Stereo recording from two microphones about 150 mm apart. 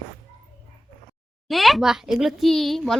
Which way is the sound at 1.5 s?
Centre (ahead or behind).